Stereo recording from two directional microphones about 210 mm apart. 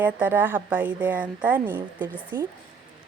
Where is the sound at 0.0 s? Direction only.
5° right (ahead or behind).